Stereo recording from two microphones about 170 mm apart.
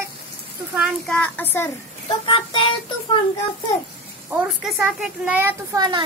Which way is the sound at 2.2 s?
25° left (ahead or behind).